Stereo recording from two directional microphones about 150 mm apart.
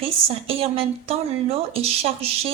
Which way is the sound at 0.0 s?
40° right (ahead or behind).